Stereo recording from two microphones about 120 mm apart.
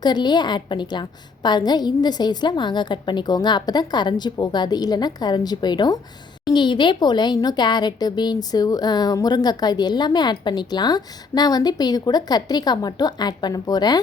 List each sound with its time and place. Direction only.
0.0 s a woman's voice: 35° left (ahead or behind)